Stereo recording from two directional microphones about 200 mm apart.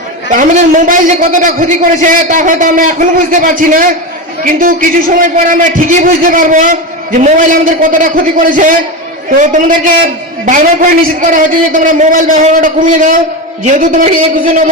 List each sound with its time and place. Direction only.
0.3 s a man's voice: 40° right (ahead or behind)